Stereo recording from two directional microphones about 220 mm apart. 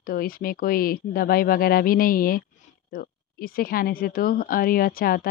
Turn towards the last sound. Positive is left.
turn(degrees=40)  # may be behind; listen again after turning